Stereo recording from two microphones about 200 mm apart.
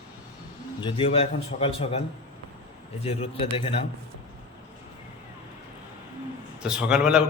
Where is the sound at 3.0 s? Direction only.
30° left (ahead or behind).